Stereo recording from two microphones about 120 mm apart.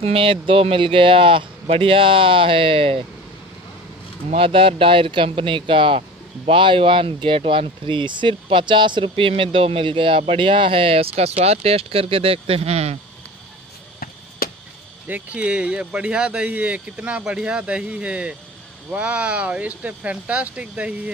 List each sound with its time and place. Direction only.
0.0 s speech: 50° right (ahead or behind)
4.4 s speech: 50° right (ahead or behind)
15.0 s speech: 10° right (ahead or behind)